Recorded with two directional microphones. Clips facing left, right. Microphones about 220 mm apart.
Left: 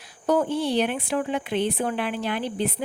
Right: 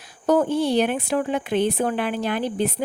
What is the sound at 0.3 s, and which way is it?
A woman's voice, 45° right (ahead or behind).